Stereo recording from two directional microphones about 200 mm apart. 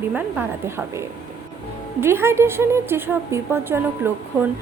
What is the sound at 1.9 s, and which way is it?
A woman's voice, 10° right (ahead or behind).